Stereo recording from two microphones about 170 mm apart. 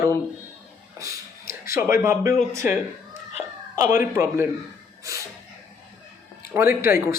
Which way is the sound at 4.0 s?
15° right (ahead or behind).